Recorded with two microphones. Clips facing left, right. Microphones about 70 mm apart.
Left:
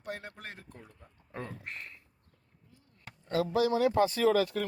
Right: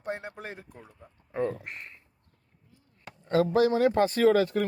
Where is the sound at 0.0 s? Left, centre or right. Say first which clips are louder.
Right 6 dB; right.